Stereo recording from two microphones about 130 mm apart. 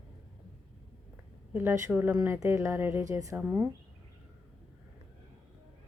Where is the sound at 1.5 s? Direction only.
15° right (ahead or behind).